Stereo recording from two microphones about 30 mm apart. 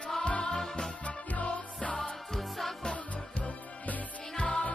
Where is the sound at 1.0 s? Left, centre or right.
Left.